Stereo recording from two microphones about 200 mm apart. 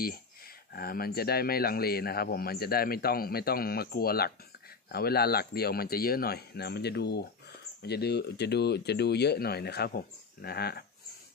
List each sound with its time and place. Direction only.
0.7 s speech: 50° left (ahead or behind)